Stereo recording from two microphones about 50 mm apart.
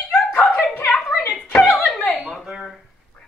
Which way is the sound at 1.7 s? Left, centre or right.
Left.